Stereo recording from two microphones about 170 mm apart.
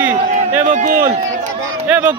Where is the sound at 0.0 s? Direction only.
10° right (ahead or behind).